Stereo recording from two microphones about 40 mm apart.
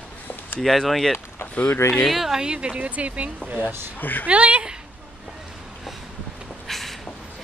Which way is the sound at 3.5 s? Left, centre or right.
Right.